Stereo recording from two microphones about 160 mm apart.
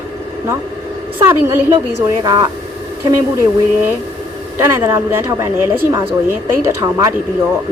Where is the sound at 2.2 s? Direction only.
25° right (ahead or behind).